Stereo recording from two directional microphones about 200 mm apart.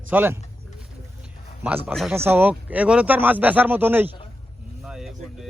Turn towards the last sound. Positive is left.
turn(degrees=0)  # may be behind; listen again after turning